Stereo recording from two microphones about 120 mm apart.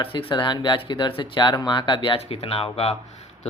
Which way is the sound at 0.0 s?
45° left (ahead or behind).